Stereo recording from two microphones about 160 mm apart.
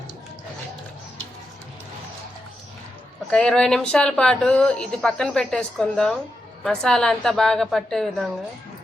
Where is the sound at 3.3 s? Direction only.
5° left (ahead or behind).